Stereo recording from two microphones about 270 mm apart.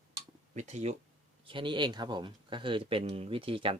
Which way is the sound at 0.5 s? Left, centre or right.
Right.